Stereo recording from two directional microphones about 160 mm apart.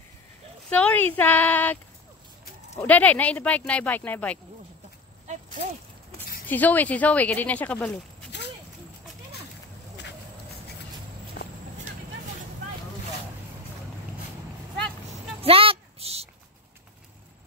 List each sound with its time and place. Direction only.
0.7 s speech: 10° left (ahead or behind)
2.8 s speech: 10° left (ahead or behind)
6.4 s speech: 10° left (ahead or behind)
11.4 s walk: 90° left
15.4 s a sound: 35° right (ahead or behind)